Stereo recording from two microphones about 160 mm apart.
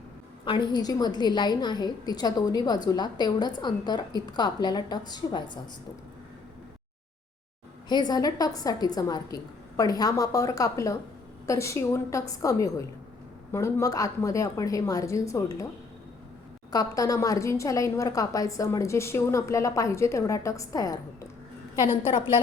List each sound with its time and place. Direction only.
0.4 s a woman's voice: 30° left (ahead or behind)
7.9 s a woman's voice: 25° left (ahead or behind)
16.7 s a woman's voice: 20° left (ahead or behind)
21.8 s a woman's voice: 35° left (ahead or behind)